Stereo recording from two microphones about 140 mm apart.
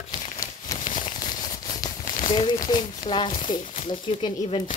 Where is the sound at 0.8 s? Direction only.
60° left (ahead or behind).